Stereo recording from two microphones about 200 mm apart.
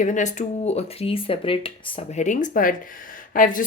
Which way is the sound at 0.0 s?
40° left (ahead or behind).